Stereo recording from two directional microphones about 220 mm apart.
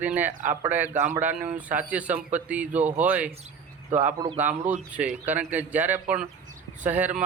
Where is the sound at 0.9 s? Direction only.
35° right (ahead or behind).